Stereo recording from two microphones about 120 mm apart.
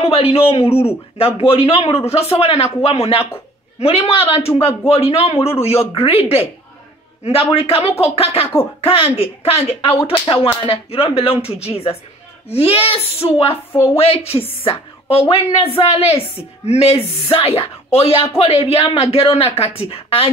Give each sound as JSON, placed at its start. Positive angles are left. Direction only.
{"t": 0.0, "sound": "a man's voice", "side_deg": 55}